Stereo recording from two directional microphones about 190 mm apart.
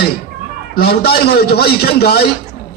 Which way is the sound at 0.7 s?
55° left (ahead or behind).